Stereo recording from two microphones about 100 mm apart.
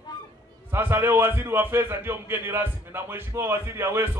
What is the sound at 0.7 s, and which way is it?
A man's voice, 25° right (ahead or behind).